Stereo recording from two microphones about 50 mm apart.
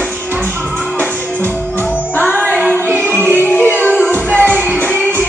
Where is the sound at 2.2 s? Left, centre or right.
Left.